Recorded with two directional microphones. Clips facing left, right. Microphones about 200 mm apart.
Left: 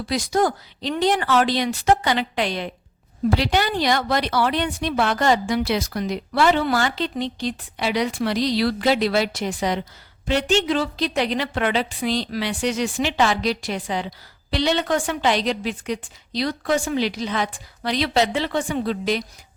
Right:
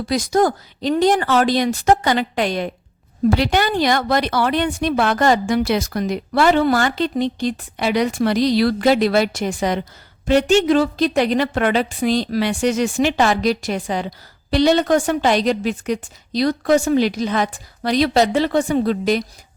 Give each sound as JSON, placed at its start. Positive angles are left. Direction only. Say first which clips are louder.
{"t": 0.0, "sound": "a woman's voice", "louder": "right 4 dB", "side_deg": -45}